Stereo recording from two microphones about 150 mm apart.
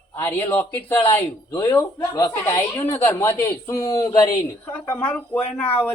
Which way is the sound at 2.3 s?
15° left (ahead or behind).